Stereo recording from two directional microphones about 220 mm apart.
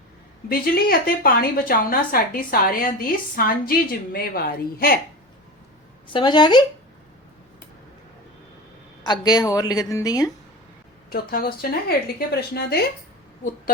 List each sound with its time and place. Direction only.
0.4 s a woman's voice: 45° left (ahead or behind)
6.1 s a woman's voice: 20° left (ahead or behind)
9.0 s a woman's voice: 20° left (ahead or behind)
11.1 s speech: 45° left (ahead or behind)